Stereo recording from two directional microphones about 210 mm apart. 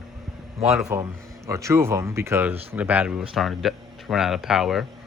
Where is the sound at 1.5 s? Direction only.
15° right (ahead or behind).